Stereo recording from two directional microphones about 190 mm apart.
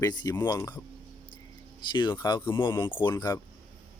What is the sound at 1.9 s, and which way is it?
Speech, 25° left (ahead or behind).